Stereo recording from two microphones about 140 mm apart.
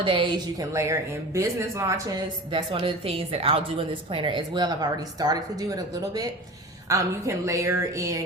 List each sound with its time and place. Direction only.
0.0 s a woman's voice: 35° right (ahead or behind)
0.6 s speech: 20° right (ahead or behind)
2.5 s a woman's voice: 35° right (ahead or behind)